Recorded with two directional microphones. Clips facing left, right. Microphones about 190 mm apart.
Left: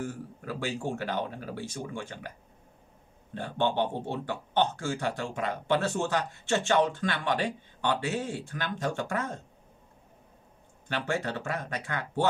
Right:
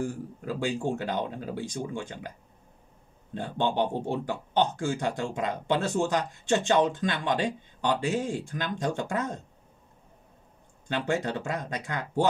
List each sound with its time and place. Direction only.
0.0 s speech: 15° right (ahead or behind)
3.3 s speech: 15° right (ahead or behind)
10.9 s speech: 20° right (ahead or behind)